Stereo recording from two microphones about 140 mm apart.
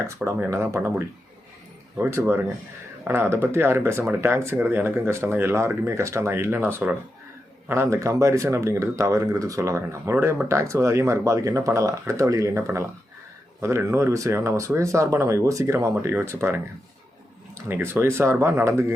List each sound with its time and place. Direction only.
0.3 s speech: 15° right (ahead or behind)